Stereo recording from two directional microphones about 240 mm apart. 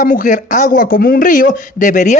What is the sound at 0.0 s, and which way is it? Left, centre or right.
Speech, left.